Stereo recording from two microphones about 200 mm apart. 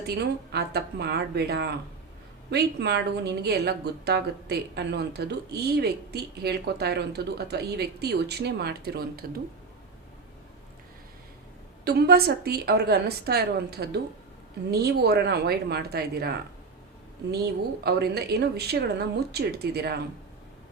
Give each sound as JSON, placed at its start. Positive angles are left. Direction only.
{"t": 0.1, "sound": "a woman's voice", "side_deg": -55}
{"t": 11.9, "sound": "speech", "side_deg": -55}
{"t": 17.8, "sound": "speech", "side_deg": -55}